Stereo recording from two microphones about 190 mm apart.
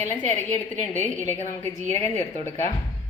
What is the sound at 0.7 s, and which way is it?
A woman's voice, 10° left (ahead or behind).